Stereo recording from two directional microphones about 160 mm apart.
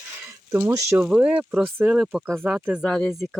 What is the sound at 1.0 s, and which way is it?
Speech, 5° right (ahead or behind).